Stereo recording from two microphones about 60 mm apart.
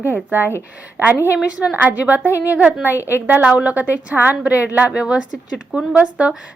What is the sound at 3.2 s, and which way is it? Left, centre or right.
A woman's voice, right.